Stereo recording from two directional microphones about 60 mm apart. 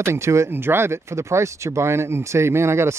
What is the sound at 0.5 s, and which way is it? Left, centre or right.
Speech, right.